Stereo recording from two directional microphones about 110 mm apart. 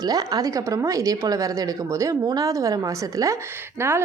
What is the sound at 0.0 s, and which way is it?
A woman's voice, 35° right (ahead or behind).